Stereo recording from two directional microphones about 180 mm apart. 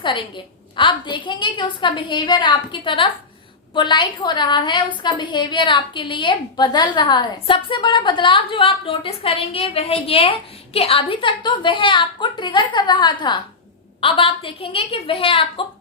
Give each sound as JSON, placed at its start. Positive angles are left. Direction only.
{"t": 0.0, "sound": "a woman's voice", "side_deg": 25}